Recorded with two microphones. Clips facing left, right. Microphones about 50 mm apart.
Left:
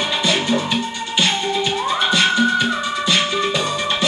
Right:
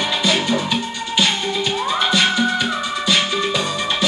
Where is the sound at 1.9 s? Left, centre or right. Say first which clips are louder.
Even; centre.